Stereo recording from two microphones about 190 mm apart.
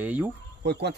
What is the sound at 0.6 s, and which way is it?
Speech, 60° right (ahead or behind).